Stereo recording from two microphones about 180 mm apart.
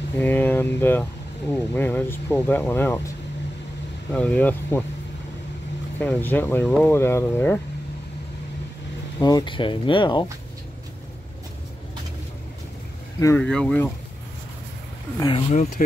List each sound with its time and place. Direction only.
0.2 s speech: 10° left (ahead or behind)
4.1 s speech: 5° left (ahead or behind)
5.9 s speech: 10° left (ahead or behind)
9.2 s speech: 25° left (ahead or behind)
13.4 s speech: 5° left (ahead or behind)
15.1 s speech: 20° left (ahead or behind)